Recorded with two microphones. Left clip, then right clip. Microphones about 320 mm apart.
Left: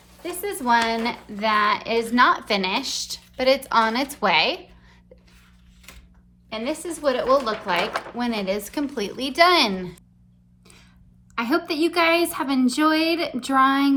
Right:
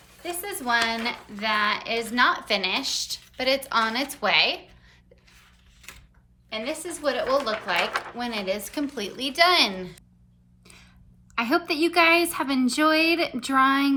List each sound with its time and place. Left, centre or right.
0.2 s a child's voice: centre
6.5 s a child's voice: centre
11.3 s a woman's voice: centre